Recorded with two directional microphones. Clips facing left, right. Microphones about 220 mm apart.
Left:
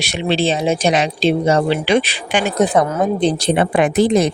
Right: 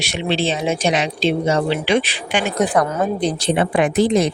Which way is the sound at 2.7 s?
25° left (ahead or behind).